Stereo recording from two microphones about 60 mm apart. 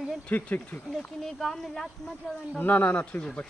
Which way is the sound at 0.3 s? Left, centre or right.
Left.